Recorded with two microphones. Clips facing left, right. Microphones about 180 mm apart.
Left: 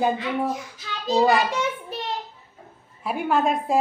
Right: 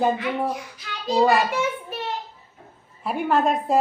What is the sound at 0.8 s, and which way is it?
Child singing, 25° left (ahead or behind).